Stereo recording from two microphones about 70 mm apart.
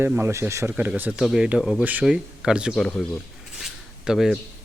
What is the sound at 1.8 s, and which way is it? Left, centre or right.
Speech, right.